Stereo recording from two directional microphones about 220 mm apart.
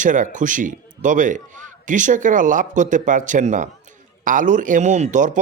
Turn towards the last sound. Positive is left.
turn(degrees=-35)  # may be behind; listen again after turning